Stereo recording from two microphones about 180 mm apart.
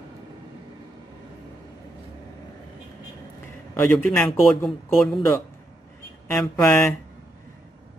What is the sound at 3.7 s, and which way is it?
A man's voice, 10° left (ahead or behind).